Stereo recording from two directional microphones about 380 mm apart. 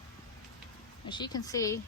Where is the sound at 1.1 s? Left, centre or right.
Centre.